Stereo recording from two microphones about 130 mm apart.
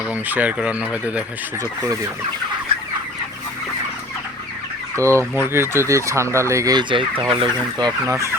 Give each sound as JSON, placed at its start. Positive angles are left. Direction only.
{"t": 0.1, "sound": "speech", "side_deg": -10}
{"t": 4.9, "sound": "speech", "side_deg": -20}